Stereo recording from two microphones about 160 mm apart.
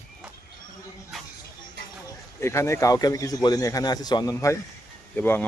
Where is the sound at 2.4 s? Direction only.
15° left (ahead or behind).